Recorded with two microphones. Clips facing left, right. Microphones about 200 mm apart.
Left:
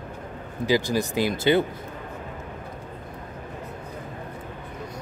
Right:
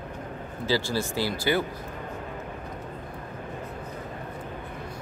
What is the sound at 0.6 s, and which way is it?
Speech, 15° left (ahead or behind).